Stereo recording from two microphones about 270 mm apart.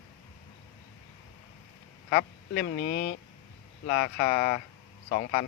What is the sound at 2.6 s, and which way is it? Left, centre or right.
Speech, left.